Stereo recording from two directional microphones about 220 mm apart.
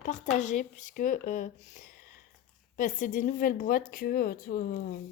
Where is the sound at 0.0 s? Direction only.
35° left (ahead or behind).